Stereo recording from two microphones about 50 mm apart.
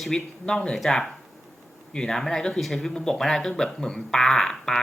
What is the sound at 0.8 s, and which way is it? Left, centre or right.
Speech, centre.